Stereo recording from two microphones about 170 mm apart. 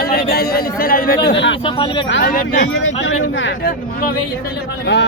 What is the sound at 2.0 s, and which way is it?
Speech, 90° left.